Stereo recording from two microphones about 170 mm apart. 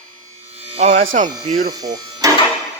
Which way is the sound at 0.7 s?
40° right (ahead or behind).